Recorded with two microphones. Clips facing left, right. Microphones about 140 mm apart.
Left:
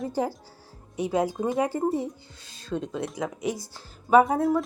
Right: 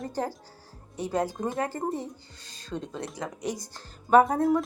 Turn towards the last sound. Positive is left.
turn(degrees=0)  # may be behind; listen again after turning